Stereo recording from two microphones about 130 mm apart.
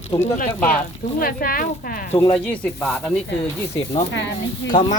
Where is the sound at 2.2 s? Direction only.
10° left (ahead or behind).